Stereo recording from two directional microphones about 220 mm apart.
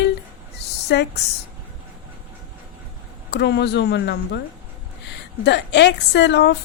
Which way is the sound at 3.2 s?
50° left (ahead or behind).